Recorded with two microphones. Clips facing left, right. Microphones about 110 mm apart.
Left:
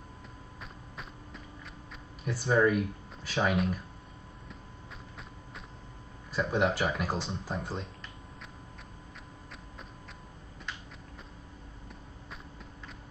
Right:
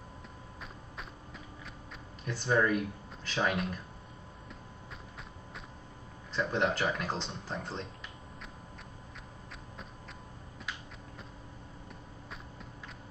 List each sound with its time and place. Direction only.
2.2 s speech: 5° left (ahead or behind)
6.3 s speech: 5° left (ahead or behind)